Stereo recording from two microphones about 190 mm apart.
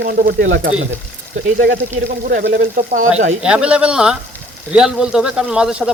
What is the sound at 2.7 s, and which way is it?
Speech, 40° right (ahead or behind).